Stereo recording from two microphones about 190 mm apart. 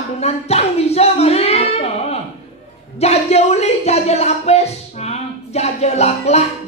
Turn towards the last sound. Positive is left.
turn(degrees=35)  # may be behind; listen again after turning